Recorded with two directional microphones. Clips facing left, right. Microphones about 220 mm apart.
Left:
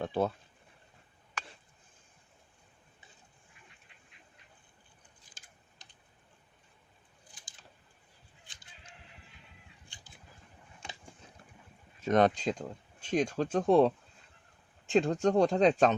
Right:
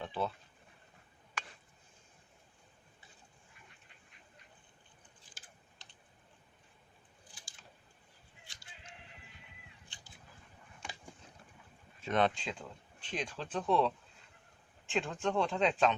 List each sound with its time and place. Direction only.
0.0 s speech: 45° left (ahead or behind)
11.9 s speech: 40° left (ahead or behind)